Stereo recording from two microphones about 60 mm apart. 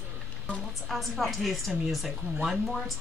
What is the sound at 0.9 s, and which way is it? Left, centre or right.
Speech, centre.